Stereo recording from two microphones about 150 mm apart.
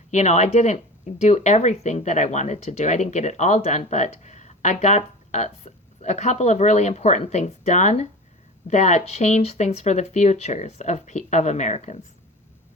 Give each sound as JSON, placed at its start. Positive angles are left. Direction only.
{"t": 0.1, "sound": "speech", "side_deg": 50}